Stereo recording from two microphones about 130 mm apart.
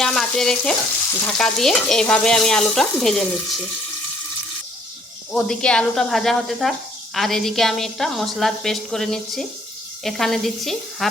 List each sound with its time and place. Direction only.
0.0 s speech: 5° left (ahead or behind)
5.3 s speech: 5° left (ahead or behind)